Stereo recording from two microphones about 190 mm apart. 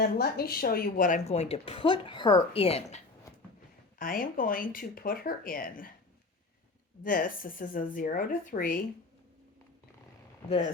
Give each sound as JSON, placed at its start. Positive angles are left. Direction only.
{"t": 0.0, "sound": "speech", "side_deg": 55}
{"t": 3.9, "sound": "speech", "side_deg": 50}
{"t": 7.0, "sound": "speech", "side_deg": 45}